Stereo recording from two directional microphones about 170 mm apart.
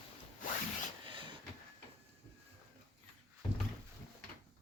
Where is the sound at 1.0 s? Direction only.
30° right (ahead or behind).